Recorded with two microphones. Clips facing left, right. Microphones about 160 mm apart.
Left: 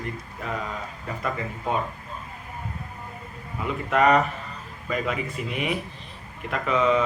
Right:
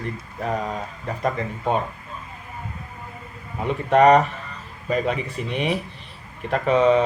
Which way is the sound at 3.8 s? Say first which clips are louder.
Right 5 dB; 35° right (ahead or behind).